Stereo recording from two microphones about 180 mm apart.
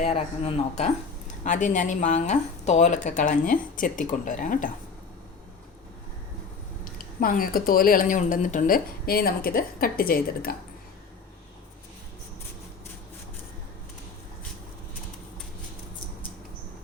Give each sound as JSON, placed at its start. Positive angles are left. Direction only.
{"t": 0.0, "sound": "speech", "side_deg": 35}
{"t": 1.5, "sound": "speech", "side_deg": 45}
{"t": 7.0, "sound": "speech", "side_deg": 50}